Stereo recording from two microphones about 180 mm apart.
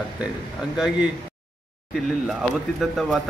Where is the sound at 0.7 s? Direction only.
5° right (ahead or behind).